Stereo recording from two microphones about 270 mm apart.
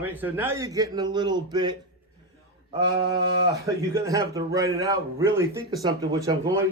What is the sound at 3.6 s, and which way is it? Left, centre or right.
A man's voice, centre.